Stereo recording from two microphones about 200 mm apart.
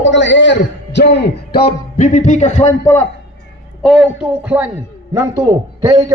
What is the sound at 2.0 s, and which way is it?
Speech, 40° left (ahead or behind).